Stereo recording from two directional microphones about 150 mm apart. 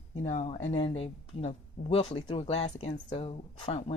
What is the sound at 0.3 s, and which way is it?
A woman's voice, 45° left (ahead or behind).